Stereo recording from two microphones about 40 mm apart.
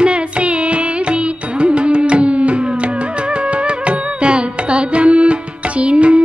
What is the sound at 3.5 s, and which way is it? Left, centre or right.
Carnatic music, right.